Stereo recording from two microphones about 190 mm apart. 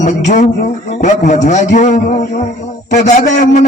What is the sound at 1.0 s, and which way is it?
A man's voice, 40° left (ahead or behind).